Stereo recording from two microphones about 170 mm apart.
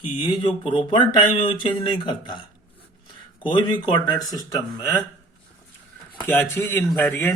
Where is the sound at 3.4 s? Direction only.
25° left (ahead or behind).